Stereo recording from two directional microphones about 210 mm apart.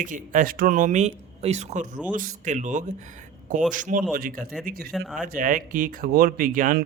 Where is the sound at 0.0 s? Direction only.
40° right (ahead or behind).